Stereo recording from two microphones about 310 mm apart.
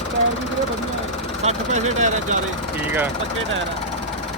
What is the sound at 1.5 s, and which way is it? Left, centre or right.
Speech, right.